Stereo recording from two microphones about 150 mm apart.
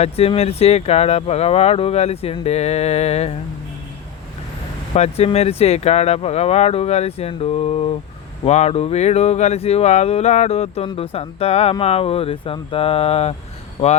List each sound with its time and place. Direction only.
0.0 s speech: 40° left (ahead or behind)
4.9 s speech: 45° left (ahead or behind)